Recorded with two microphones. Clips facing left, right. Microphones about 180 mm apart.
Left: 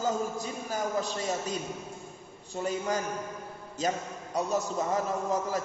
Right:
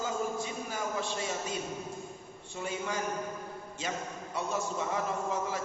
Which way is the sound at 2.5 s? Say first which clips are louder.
Left 5 dB; 40° left (ahead or behind).